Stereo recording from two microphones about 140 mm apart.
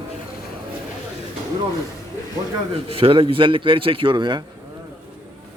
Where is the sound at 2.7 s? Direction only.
45° right (ahead or behind).